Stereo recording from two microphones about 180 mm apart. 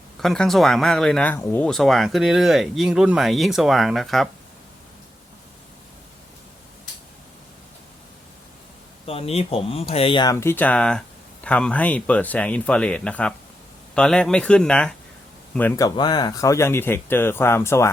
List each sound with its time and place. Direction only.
0.2 s speech: centre (ahead or behind)
9.0 s speech: 35° left (ahead or behind)
10.3 s speech: 10° left (ahead or behind)